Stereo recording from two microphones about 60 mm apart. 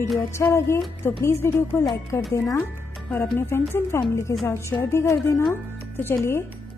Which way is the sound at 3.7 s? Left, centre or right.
Left.